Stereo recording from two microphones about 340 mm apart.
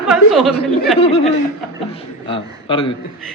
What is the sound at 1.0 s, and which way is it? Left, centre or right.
A man's voice, centre.